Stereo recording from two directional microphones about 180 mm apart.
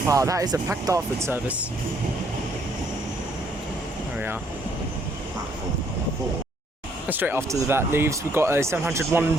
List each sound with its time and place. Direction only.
0.1 s speech: 20° right (ahead or behind)
7.1 s speech: 10° right (ahead or behind)